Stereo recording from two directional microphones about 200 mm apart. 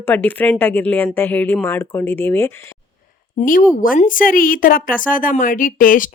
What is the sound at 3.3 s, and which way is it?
A woman's voice, 45° left (ahead or behind).